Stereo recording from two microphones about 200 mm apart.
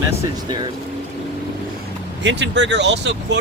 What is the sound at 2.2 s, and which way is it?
Speech, 60° right (ahead or behind).